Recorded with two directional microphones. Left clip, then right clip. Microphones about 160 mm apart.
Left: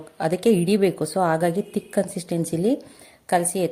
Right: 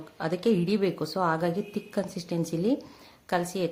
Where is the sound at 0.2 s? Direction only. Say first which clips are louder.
Left 6 dB; 25° left (ahead or behind).